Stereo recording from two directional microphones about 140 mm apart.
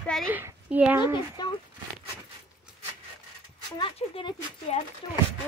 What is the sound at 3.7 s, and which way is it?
Speech, 35° left (ahead or behind).